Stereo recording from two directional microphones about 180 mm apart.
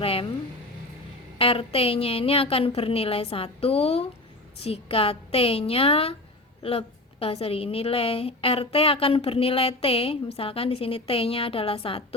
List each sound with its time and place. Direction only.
0.0 s speech: 30° left (ahead or behind)
1.4 s a woman's voice: 30° left (ahead or behind)